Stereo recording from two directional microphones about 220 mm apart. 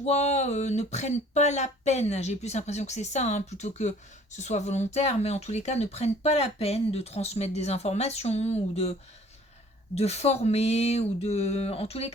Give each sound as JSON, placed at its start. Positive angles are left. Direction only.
{"t": 0.0, "sound": "speech", "side_deg": 30}